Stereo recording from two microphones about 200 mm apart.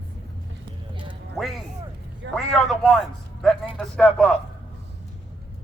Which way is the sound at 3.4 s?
5° left (ahead or behind).